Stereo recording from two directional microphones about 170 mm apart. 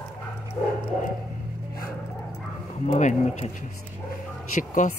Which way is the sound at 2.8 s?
45° left (ahead or behind).